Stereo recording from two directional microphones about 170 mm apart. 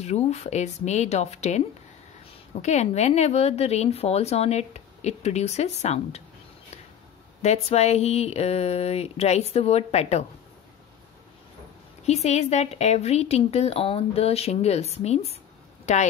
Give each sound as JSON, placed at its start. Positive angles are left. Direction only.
{"t": 0.0, "sound": "a woman's voice", "side_deg": 40}
{"t": 7.4, "sound": "a woman's voice", "side_deg": 40}
{"t": 12.0, "sound": "a woman's voice", "side_deg": 40}